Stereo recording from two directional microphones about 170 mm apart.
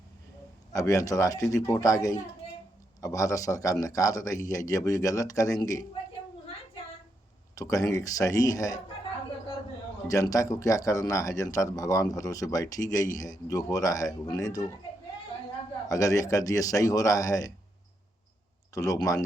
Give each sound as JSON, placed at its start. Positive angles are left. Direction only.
{"t": 0.7, "sound": "speech", "side_deg": 20}
{"t": 7.5, "sound": "speech", "side_deg": 20}
{"t": 10.1, "sound": "speech", "side_deg": 20}
{"t": 15.9, "sound": "speech", "side_deg": 20}
{"t": 18.7, "sound": "speech", "side_deg": 20}